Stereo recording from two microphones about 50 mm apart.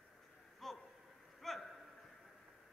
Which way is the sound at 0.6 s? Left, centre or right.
Centre.